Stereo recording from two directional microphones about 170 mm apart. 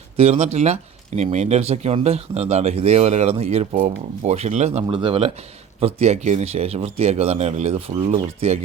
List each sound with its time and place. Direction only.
0.2 s speech: 40° right (ahead or behind)
4.9 s speech: 30° right (ahead or behind)